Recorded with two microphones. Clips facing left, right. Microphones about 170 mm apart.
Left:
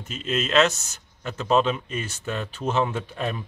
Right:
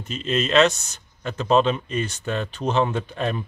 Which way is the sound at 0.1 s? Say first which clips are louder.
Right 2 dB; 5° left (ahead or behind).